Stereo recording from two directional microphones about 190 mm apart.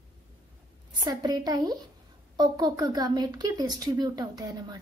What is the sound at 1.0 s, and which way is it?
A woman's voice, 20° right (ahead or behind).